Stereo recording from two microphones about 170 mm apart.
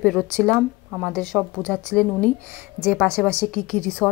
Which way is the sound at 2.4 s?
10° right (ahead or behind).